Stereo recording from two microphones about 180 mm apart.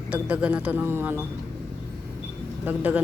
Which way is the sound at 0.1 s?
5° right (ahead or behind).